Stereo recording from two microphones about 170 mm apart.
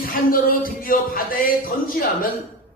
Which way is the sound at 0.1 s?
55° left (ahead or behind).